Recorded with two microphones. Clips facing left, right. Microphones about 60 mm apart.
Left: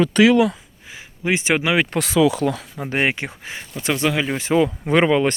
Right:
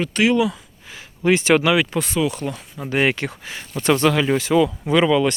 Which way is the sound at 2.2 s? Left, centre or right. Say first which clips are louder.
Left 6 dB; left.